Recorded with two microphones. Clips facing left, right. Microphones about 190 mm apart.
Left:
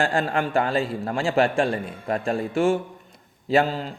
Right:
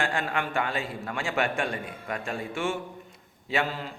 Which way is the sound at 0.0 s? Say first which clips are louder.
Left 6 dB; 35° left (ahead or behind).